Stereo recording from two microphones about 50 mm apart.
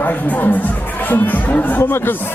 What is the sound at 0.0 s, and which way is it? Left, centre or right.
Speech, left.